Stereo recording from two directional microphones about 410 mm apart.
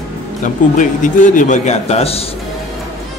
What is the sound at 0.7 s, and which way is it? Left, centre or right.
A man's voice, centre.